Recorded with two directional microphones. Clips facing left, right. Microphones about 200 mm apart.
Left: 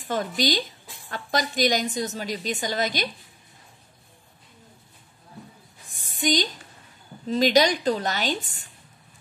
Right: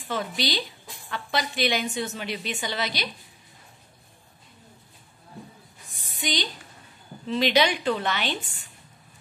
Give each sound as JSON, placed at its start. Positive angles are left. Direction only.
{"t": 0.1, "sound": "a woman's voice", "side_deg": 45}
{"t": 5.9, "sound": "a sound", "side_deg": 50}
{"t": 7.2, "sound": "a woman's voice", "side_deg": 40}